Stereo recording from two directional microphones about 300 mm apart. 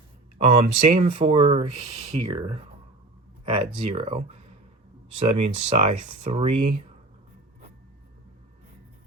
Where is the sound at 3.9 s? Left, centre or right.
Centre.